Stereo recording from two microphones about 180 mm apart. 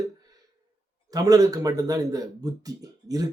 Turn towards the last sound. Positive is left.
turn(degrees=-20)  # may be behind; listen again after turning